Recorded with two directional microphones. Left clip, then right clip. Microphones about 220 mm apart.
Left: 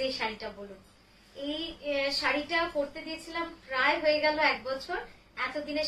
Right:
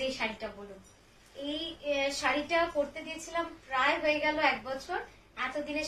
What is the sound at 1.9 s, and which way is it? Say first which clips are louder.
A woman's voice: left 1 dB; 15° left (ahead or behind).